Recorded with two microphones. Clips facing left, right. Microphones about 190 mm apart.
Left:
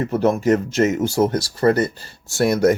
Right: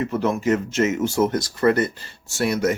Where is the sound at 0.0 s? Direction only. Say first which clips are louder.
Left 4 dB; 40° left (ahead or behind).